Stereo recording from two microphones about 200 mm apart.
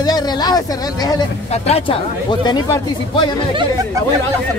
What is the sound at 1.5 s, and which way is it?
Speech, 30° left (ahead or behind).